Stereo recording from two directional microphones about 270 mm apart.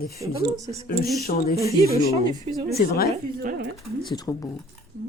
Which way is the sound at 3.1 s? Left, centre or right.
Right.